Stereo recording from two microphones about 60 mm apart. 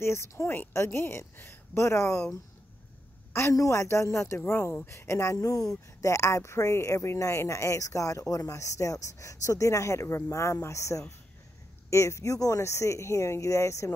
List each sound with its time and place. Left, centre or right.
0.0 s speech: left
3.5 s speech: left